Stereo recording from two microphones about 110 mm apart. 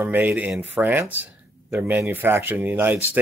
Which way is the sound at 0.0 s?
15° right (ahead or behind).